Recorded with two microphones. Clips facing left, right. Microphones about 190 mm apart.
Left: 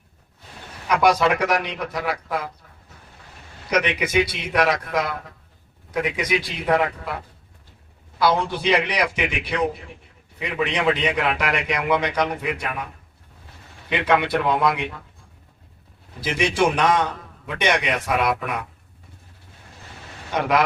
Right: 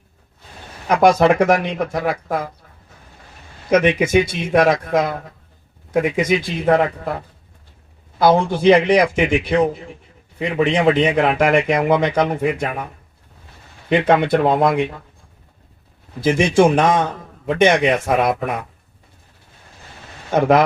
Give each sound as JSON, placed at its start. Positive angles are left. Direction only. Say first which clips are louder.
{"t": 0.9, "sound": "a man's voice", "louder": "right 5 dB", "side_deg": -50}
{"t": 3.7, "sound": "a man's voice", "louder": "right 8 dB", "side_deg": -50}
{"t": 8.2, "sound": "a man's voice", "louder": "right 7 dB", "side_deg": -50}
{"t": 13.9, "sound": "a man's voice", "louder": "right 6 dB", "side_deg": -45}
{"t": 16.2, "sound": "a man's voice", "louder": "right 7 dB", "side_deg": -50}
{"t": 20.3, "sound": "a man's voice", "louder": "right 6 dB", "side_deg": -50}